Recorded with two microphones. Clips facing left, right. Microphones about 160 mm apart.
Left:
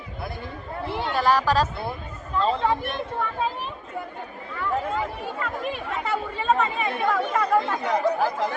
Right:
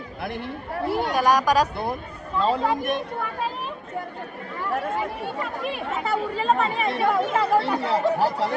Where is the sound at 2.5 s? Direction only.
40° right (ahead or behind).